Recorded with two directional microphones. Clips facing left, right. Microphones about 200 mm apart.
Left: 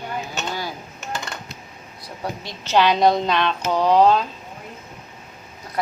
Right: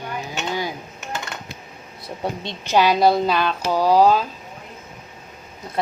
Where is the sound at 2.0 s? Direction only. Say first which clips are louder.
Right 3 dB; 25° right (ahead or behind).